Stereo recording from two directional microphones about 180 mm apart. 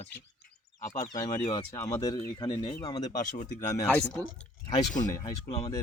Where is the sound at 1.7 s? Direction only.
20° left (ahead or behind).